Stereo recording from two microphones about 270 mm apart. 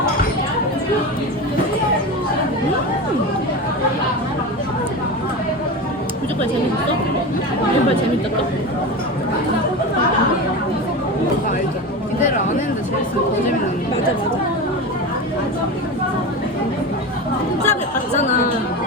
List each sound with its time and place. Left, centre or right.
17.7 s chatter: left